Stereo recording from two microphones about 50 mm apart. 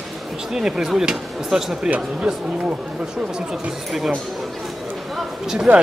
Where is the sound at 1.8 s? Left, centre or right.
Right.